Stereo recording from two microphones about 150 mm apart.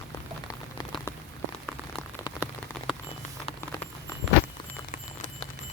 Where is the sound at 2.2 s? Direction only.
25° left (ahead or behind).